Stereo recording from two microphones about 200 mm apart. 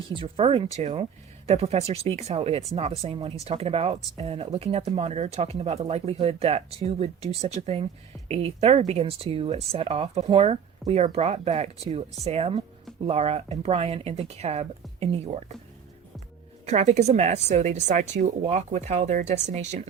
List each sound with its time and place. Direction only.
0.1 s speech: 25° right (ahead or behind)
16.6 s speech: 35° right (ahead or behind)